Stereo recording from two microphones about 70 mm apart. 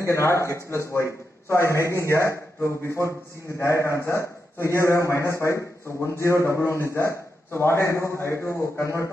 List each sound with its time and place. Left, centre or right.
0.0 s a man's voice: left